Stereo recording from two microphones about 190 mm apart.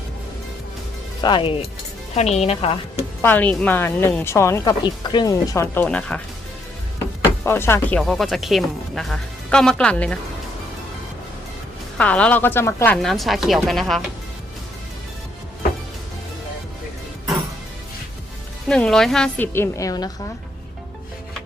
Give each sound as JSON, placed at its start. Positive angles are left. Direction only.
{"t": 1.2, "sound": "speech", "side_deg": 25}
{"t": 3.2, "sound": "speech", "side_deg": 10}
{"t": 7.4, "sound": "speech", "side_deg": 15}
{"t": 11.9, "sound": "speech", "side_deg": 5}
{"t": 18.7, "sound": "speech", "side_deg": 5}